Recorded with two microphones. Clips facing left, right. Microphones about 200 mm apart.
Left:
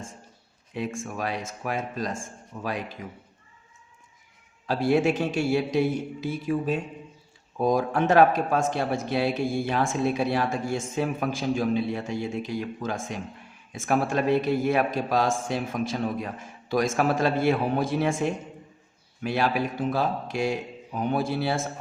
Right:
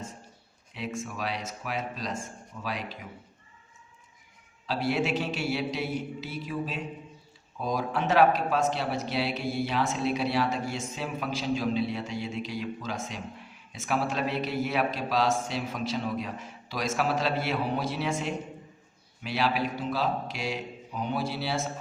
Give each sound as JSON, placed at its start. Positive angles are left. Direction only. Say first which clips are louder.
{"t": 0.7, "sound": "speech", "louder": "left 4 dB", "side_deg": 50}
{"t": 4.6, "sound": "speech", "louder": "left 6 dB", "side_deg": 50}